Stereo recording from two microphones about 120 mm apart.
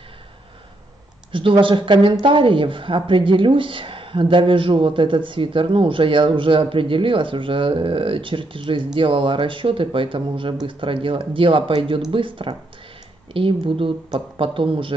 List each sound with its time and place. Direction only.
1.3 s speech: 45° right (ahead or behind)